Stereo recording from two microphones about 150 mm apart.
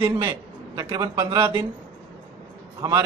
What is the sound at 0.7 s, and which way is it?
Speech, 25° right (ahead or behind).